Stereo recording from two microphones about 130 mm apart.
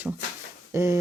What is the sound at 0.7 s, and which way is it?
Speech, 20° right (ahead or behind).